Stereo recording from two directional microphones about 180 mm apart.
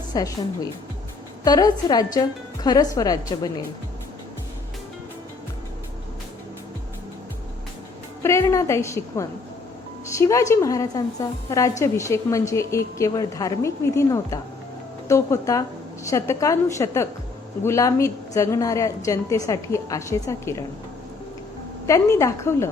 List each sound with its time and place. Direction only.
0.1 s a woman's voice: 20° left (ahead or behind)
8.2 s a woman's voice: 15° left (ahead or behind)
21.8 s a woman's voice: 15° left (ahead or behind)